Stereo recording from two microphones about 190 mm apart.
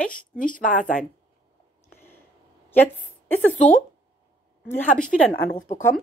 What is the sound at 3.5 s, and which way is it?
Speech, 40° left (ahead or behind).